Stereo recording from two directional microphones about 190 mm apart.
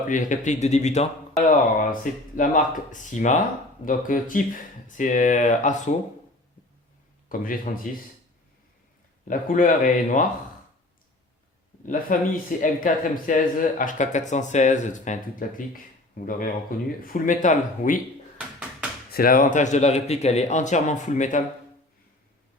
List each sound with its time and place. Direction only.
0.1 s speech: 40° left (ahead or behind)
7.3 s speech: 45° left (ahead or behind)
9.2 s speech: 45° left (ahead or behind)
11.9 s speech: 45° left (ahead or behind)
19.1 s speech: 50° left (ahead or behind)